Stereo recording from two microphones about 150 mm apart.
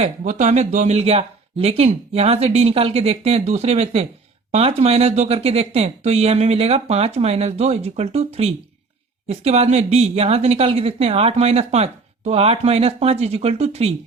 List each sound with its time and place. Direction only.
0.0 s a woman's voice: 50° right (ahead or behind)